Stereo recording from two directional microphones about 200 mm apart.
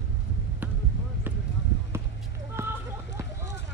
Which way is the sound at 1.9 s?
10° right (ahead or behind).